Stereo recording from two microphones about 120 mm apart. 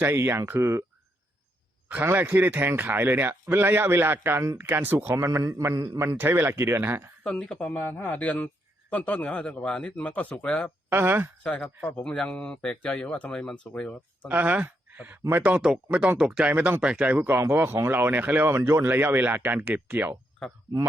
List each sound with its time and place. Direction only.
0.0 s a man's voice: 20° right (ahead or behind)
1.9 s a man's voice: 15° right (ahead or behind)
6.1 s a man's voice: 20° right (ahead or behind)
7.3 s speech: 5° left (ahead or behind)
10.8 s speech: 20° right (ahead or behind)
11.4 s speech: 10° left (ahead or behind)
14.3 s speech: 15° right (ahead or behind)